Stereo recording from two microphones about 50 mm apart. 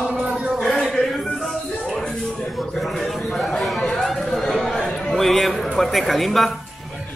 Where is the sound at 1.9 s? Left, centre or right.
Centre.